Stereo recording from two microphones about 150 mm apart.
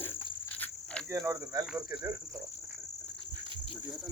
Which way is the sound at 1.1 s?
20° right (ahead or behind).